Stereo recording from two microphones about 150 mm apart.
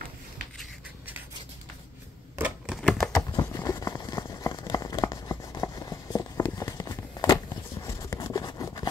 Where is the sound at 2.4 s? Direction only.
10° right (ahead or behind).